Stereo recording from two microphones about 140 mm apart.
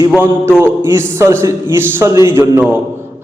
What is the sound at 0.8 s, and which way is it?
A man's voice, 20° right (ahead or behind).